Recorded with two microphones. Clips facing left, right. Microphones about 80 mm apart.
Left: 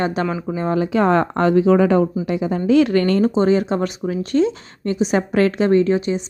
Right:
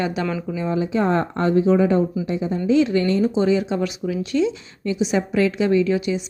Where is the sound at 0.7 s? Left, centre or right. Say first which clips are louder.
Left 4 dB; left.